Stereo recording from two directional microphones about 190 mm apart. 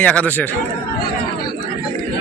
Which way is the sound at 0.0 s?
5° left (ahead or behind).